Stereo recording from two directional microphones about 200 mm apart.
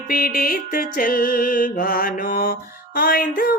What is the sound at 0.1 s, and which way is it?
Mantra, 45° left (ahead or behind).